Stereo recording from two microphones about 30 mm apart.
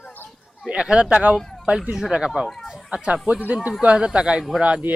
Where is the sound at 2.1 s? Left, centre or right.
Right.